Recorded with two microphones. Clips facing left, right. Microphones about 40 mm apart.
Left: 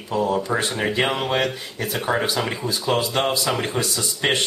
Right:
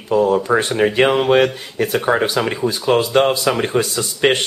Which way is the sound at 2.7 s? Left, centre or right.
Right.